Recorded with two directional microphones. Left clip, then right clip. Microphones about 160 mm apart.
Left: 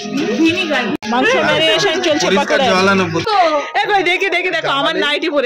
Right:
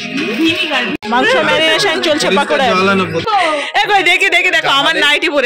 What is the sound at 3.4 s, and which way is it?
A woman's voice, centre (ahead or behind).